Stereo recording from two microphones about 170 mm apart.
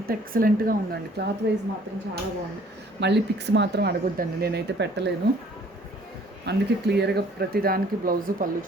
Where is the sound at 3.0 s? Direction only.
90° right.